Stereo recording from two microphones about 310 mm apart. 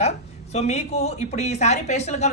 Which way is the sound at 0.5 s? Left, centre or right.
Left.